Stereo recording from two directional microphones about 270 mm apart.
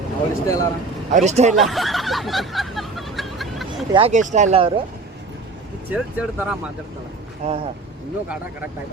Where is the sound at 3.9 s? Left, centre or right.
Right.